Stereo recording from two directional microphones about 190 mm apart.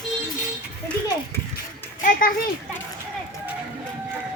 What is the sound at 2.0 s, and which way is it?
Speech, 45° left (ahead or behind).